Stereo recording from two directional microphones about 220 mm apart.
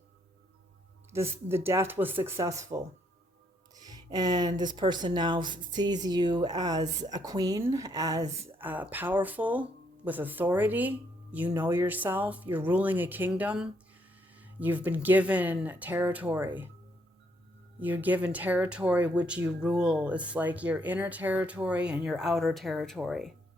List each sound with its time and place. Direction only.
1.1 s speech: 10° right (ahead or behind)
17.7 s speech: 10° right (ahead or behind)